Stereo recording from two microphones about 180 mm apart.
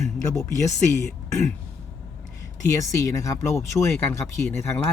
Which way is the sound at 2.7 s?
15° left (ahead or behind).